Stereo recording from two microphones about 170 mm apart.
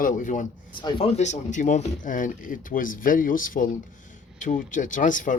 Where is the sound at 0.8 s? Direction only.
30° left (ahead or behind).